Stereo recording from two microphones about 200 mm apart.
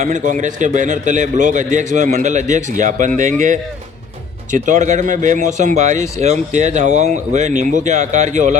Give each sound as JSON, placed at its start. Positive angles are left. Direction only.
{"t": 0.0, "sound": "speech", "side_deg": -40}